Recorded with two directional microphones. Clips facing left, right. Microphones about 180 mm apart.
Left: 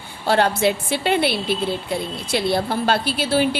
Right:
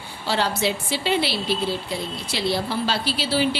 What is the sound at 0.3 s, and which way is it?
A woman's voice, 55° left (ahead or behind).